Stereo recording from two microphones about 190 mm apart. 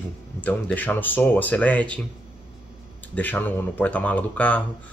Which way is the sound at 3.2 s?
10° left (ahead or behind).